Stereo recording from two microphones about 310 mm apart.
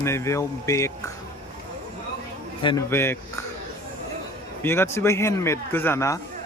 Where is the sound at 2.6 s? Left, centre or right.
Centre.